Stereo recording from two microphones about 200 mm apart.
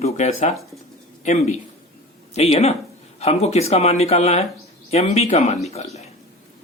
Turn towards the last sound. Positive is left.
turn(degrees=35)  # may be behind; listen again after turning